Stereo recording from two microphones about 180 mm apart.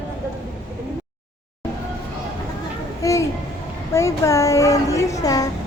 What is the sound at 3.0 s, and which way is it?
A child's voice, 15° left (ahead or behind).